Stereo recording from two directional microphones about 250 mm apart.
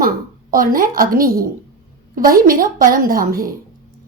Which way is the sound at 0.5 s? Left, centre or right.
Right.